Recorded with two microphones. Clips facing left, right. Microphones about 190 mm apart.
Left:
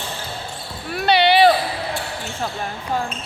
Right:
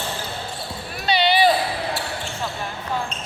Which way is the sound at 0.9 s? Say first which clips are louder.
Left 4 dB; 60° left (ahead or behind).